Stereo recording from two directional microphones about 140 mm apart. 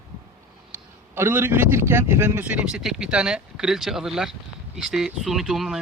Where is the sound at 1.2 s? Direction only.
15° right (ahead or behind).